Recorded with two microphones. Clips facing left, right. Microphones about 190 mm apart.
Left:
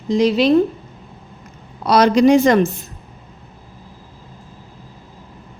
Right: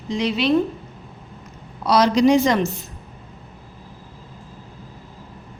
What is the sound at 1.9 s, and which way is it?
Speech, 55° left (ahead or behind).